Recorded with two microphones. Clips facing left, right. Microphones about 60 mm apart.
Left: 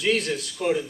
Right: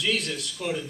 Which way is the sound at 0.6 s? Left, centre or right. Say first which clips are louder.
Left 7 dB; centre.